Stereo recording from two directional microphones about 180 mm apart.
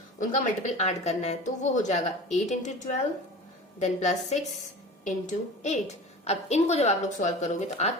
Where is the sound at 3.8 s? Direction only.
40° left (ahead or behind).